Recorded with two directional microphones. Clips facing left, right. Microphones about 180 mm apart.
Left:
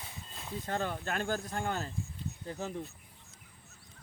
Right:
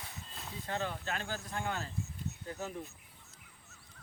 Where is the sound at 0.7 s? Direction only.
50° left (ahead or behind).